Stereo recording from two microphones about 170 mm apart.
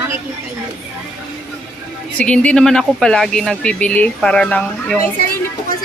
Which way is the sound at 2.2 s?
5° left (ahead or behind).